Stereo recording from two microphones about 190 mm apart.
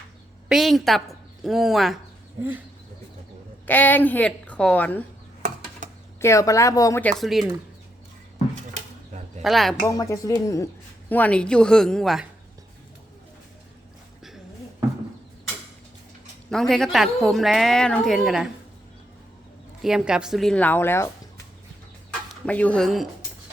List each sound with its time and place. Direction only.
0.4 s a woman's voice: centre (ahead or behind)
3.7 s a woman's voice: 10° left (ahead or behind)
6.1 s a woman's voice: 15° left (ahead or behind)
7.0 s a woman's voice: centre (ahead or behind)
9.4 s a woman's voice: centre (ahead or behind)
9.8 s a woman's voice: 15° left (ahead or behind); by 12.3 s centre (ahead or behind)
16.5 s a woman's voice: centre (ahead or behind)
19.8 s a woman's voice: 5° right (ahead or behind); by 21.1 s 10° left (ahead or behind)
22.4 s a woman's voice: 5° left (ahead or behind)